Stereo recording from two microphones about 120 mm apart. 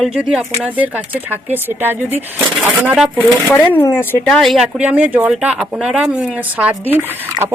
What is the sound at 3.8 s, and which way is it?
Speech, 20° left (ahead or behind).